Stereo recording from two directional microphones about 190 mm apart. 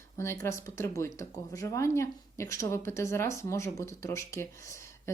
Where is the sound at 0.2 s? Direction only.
15° left (ahead or behind).